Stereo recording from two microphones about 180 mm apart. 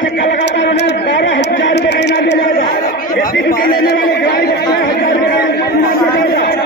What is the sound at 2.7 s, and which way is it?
Chatter, 50° left (ahead or behind).